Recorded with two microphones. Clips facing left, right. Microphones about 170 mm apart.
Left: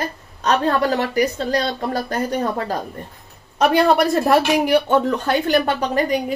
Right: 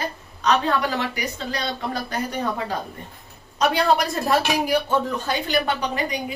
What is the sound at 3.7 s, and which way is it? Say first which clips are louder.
Speech: left 7 dB; 60° left (ahead or behind).